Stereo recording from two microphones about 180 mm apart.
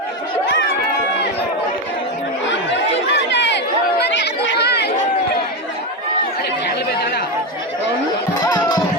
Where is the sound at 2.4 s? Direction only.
85° left; by 5.1 s 70° left (ahead or behind).